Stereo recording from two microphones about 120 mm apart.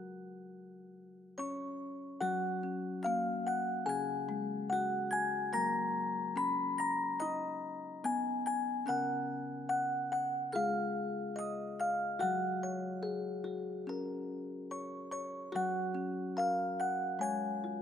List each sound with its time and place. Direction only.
2.1 s music: centre (ahead or behind)
9.7 s glockenspiel: centre (ahead or behind)
10.8 s music: 35° left (ahead or behind)
11.3 s glockenspiel: centre (ahead or behind)
15.1 s glockenspiel: centre (ahead or behind)
16.2 s music: 5° right (ahead or behind)